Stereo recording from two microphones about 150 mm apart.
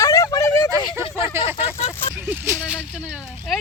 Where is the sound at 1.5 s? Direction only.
45° left (ahead or behind).